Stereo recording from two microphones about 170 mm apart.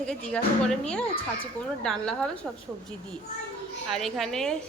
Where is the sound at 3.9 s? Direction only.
Centre (ahead or behind).